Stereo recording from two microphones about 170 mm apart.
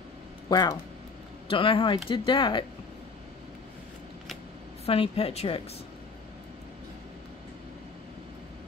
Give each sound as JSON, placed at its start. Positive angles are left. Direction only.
{"t": 0.5, "sound": "a woman's voice", "side_deg": 25}
{"t": 4.8, "sound": "a woman's voice", "side_deg": 35}